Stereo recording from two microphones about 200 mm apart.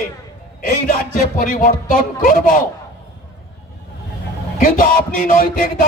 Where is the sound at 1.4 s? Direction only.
40° left (ahead or behind).